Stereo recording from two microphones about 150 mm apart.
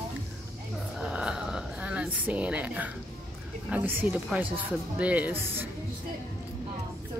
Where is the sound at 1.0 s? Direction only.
5° right (ahead or behind).